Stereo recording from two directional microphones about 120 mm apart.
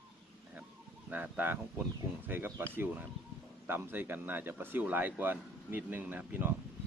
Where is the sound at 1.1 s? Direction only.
15° right (ahead or behind).